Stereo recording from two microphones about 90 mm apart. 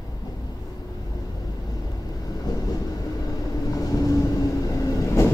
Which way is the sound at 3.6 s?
40° left (ahead or behind).